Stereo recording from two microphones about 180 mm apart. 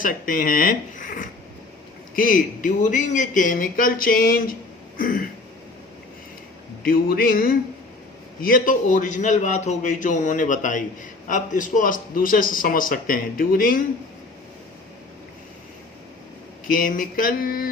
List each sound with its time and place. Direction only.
0.0 s a man's voice: 50° left (ahead or behind)
4.9 s throat clearing: 50° left (ahead or behind)
6.8 s a man's voice: 55° left (ahead or behind)
16.6 s a man's voice: 50° left (ahead or behind)